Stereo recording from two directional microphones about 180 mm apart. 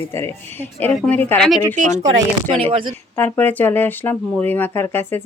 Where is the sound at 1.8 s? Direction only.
40° right (ahead or behind).